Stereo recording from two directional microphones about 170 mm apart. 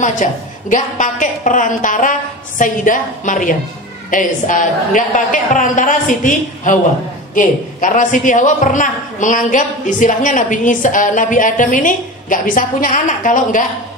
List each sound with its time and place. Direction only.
0.0 s a man's voice: 50° left (ahead or behind)